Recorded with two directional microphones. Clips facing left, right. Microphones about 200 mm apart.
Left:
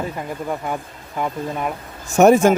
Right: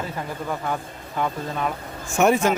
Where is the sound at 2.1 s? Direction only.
45° left (ahead or behind).